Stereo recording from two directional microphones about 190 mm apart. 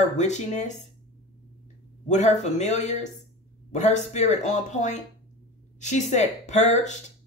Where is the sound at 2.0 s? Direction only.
40° left (ahead or behind).